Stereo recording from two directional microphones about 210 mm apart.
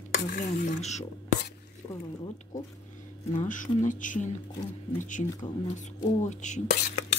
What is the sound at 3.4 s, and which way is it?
Speech, 40° left (ahead or behind).